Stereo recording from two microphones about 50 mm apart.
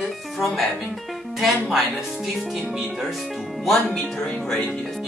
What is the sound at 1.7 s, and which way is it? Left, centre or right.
Speech, centre.